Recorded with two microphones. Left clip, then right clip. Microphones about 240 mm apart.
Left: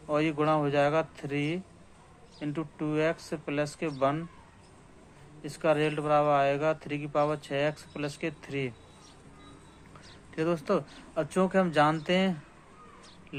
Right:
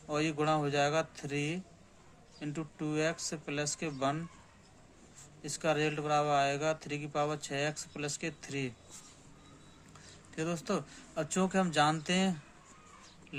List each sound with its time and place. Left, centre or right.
0.1 s speech: centre
5.4 s speech: centre
10.3 s speech: centre